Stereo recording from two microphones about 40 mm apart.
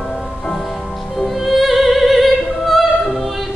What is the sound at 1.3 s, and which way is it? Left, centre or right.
Opera, centre.